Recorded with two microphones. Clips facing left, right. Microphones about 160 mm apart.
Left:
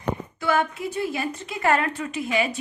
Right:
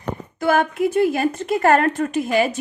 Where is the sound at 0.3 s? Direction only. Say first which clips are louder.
Right 7 dB; 50° right (ahead or behind).